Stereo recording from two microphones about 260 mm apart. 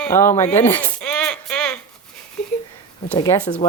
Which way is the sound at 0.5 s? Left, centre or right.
Centre.